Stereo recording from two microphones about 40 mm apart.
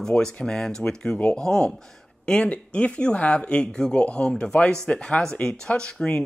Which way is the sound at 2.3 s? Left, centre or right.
Left.